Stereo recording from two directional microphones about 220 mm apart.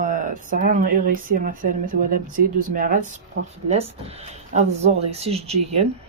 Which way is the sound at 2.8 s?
40° right (ahead or behind).